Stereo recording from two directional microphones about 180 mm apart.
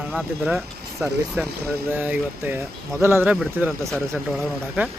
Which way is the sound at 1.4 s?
10° right (ahead or behind).